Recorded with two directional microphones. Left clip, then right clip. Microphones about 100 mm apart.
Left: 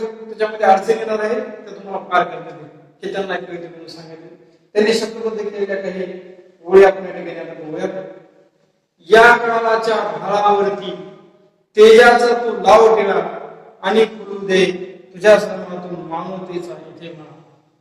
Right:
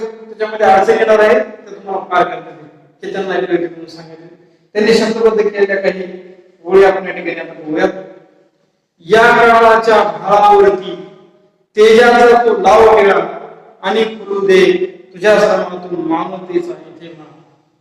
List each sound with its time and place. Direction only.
0.0 s a man's voice: 25° right (ahead or behind)